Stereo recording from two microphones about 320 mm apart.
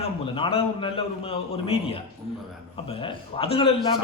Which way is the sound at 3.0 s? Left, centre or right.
Centre.